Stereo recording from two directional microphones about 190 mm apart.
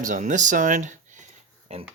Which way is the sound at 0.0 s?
40° right (ahead or behind).